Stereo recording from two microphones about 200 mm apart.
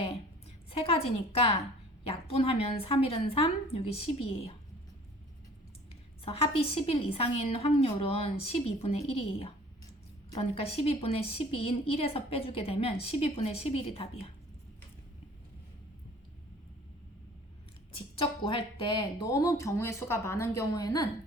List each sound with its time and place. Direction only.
0.7 s a woman's voice: 30° left (ahead or behind)
6.2 s a woman's voice: 30° left (ahead or behind)
17.9 s speech: 25° left (ahead or behind)